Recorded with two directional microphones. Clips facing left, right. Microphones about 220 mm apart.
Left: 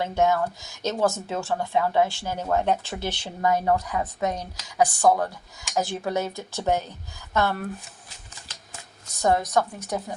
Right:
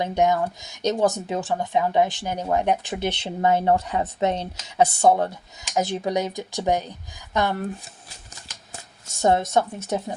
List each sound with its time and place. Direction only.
0.0 s speech: 15° right (ahead or behind)
9.0 s speech: 25° right (ahead or behind)